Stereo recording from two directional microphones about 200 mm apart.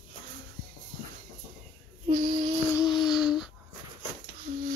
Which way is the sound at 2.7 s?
20° left (ahead or behind).